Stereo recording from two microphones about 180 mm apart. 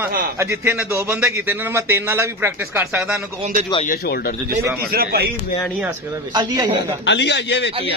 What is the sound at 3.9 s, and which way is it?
Speech, 55° left (ahead or behind).